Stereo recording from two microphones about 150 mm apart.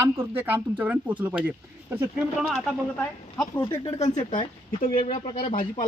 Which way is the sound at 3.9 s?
50° left (ahead or behind).